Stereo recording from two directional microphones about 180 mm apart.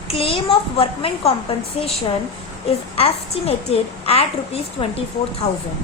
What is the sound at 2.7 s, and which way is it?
Speech, 35° left (ahead or behind).